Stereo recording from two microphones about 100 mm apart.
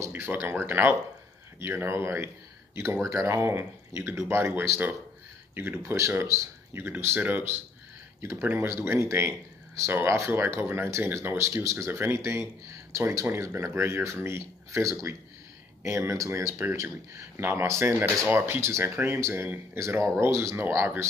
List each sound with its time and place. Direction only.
0.0 s speech: 20° right (ahead or behind)